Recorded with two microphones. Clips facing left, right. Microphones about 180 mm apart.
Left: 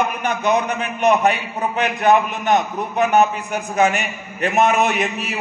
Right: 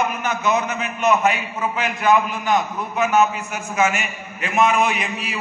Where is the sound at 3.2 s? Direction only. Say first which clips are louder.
Left 2 dB; 35° left (ahead or behind).